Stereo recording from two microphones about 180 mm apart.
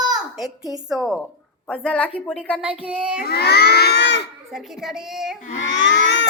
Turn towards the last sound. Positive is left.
turn(degrees=90)